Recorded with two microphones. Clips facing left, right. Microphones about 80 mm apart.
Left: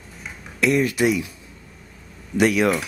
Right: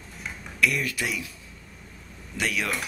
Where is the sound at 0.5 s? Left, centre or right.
Left.